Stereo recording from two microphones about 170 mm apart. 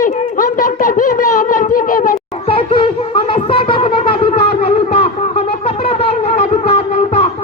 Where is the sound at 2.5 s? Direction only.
30° left (ahead or behind).